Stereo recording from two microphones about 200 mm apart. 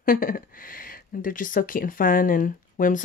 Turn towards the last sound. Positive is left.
turn(degrees=40)  # may be behind; listen again after turning